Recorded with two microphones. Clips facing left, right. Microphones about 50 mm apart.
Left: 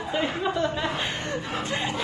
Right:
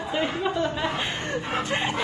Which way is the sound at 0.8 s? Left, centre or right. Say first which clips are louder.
Right 1 dB; right.